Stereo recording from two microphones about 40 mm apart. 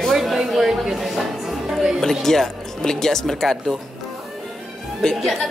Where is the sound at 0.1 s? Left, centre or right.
Centre.